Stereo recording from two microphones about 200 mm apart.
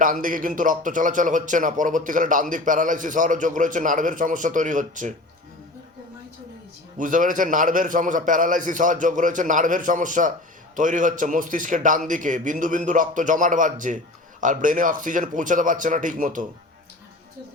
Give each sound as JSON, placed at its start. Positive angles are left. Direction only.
{"t": 0.0, "sound": "speech", "side_deg": -40}
{"t": 7.0, "sound": "speech", "side_deg": -40}